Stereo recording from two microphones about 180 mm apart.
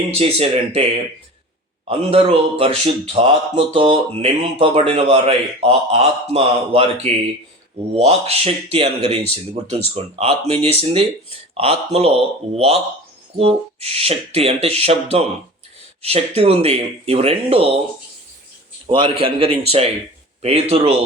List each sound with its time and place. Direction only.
0.2 s speech: 35° right (ahead or behind)
18.9 s speech: 30° right (ahead or behind)